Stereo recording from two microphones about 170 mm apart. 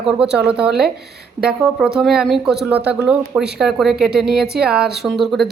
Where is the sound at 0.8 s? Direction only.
70° right (ahead or behind).